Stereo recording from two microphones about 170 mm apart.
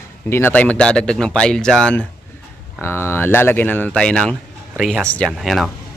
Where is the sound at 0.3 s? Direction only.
15° left (ahead or behind).